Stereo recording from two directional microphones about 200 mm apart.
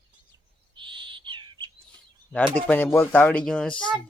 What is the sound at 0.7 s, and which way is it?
Bird, 25° right (ahead or behind).